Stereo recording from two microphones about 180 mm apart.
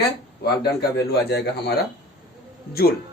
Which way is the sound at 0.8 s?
65° left (ahead or behind).